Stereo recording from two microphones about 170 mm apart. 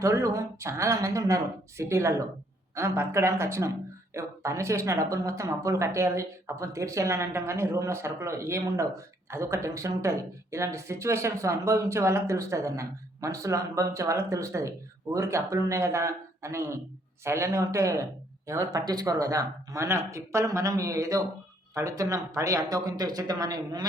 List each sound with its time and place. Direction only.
0.0 s speech: 15° right (ahead or behind)